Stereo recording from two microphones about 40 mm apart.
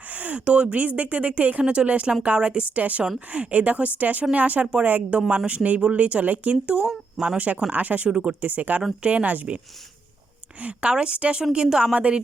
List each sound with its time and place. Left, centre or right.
0.1 s speech: right
1.6 s speech: right
4.6 s speech: right
4.9 s speech: right
6.8 s speech: centre
7.3 s speech: right
8.1 s speech: right
8.4 s speech: right
10.6 s speech: right; by 11.9 s centre
11.9 s speech: right